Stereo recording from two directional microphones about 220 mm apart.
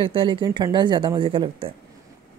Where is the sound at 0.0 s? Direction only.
20° right (ahead or behind).